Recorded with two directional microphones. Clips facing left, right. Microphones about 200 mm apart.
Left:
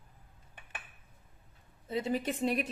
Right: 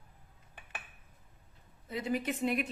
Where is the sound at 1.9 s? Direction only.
30° left (ahead or behind).